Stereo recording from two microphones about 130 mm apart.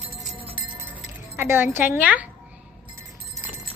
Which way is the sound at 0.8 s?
15° right (ahead or behind).